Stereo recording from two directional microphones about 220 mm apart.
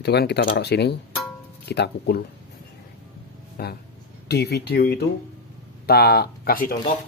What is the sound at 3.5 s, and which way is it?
Speech, 45° left (ahead or behind).